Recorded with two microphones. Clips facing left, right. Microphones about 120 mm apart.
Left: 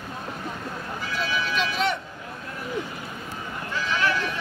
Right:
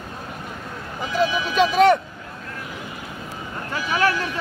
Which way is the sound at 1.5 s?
45° right (ahead or behind).